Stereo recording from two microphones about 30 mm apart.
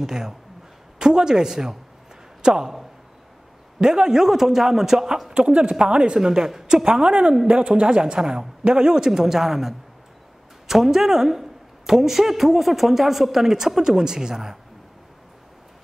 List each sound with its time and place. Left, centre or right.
0.0 s speech: centre
3.8 s a woman's voice: right
5.3 s speech: right
6.1 s a woman's voice: centre; by 8.2 s right
8.2 s a woman's voice: right